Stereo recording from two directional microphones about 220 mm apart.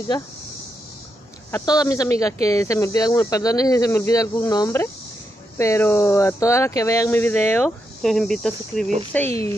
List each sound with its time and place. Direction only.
1.5 s speech: 15° left (ahead or behind)